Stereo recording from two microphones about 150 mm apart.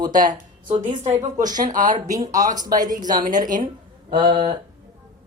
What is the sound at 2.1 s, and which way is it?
Speech, 25° right (ahead or behind).